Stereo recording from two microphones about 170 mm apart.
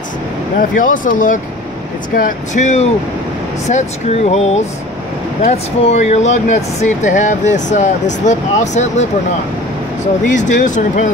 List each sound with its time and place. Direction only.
0.6 s speech: 50° left (ahead or behind)
10.3 s speech: 45° left (ahead or behind)